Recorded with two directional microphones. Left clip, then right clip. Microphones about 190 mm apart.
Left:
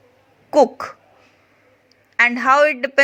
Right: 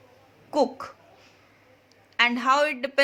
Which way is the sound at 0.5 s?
30° left (ahead or behind).